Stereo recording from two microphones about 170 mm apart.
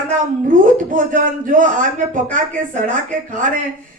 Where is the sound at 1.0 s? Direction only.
50° right (ahead or behind).